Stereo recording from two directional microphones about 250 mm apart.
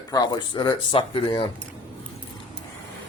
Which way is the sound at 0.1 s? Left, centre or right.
Centre.